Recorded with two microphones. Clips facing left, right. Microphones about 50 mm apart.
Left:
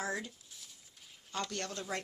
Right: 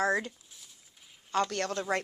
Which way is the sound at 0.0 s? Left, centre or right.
Right.